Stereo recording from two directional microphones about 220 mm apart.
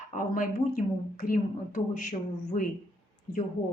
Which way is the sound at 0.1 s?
40° left (ahead or behind).